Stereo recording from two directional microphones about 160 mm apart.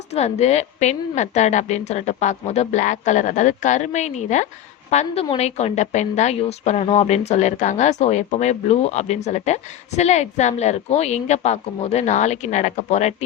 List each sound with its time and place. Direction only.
0.1 s a woman's voice: 45° left (ahead or behind)